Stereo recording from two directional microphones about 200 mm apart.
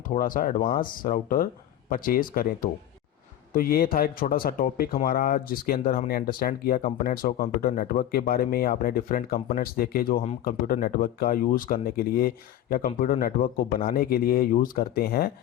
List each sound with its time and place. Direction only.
0.1 s speech: 45° left (ahead or behind)